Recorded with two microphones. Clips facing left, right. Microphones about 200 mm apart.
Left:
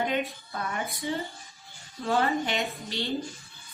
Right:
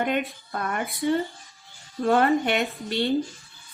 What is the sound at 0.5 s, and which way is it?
A woman's voice, 55° right (ahead or behind).